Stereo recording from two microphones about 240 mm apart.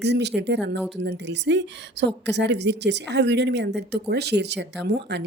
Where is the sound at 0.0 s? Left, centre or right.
Right.